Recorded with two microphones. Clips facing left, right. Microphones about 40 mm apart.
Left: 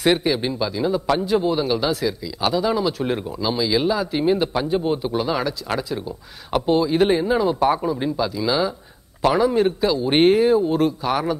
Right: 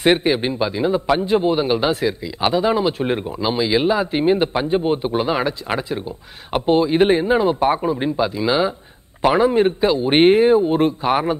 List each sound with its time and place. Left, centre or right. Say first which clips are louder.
0.0 s a man's voice: right 3 dB; right